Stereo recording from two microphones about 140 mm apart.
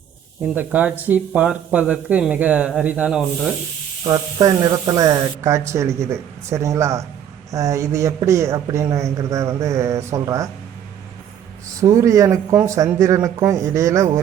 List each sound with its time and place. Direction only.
0.5 s speech: 10° right (ahead or behind)
4.0 s a man's voice: 30° right (ahead or behind)
11.8 s a man's voice: 20° right (ahead or behind)